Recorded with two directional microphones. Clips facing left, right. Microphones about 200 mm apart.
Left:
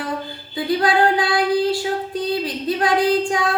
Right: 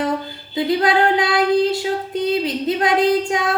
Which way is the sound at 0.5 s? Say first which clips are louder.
Right 2 dB; 20° right (ahead or behind).